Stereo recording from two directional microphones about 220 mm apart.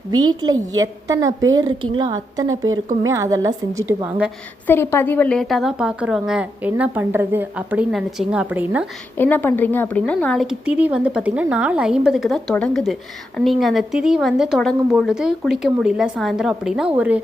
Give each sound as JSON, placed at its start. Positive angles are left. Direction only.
{"t": 0.1, "sound": "a woman's voice", "side_deg": -20}
{"t": 4.6, "sound": "speech", "side_deg": 10}
{"t": 9.1, "sound": "speech", "side_deg": 10}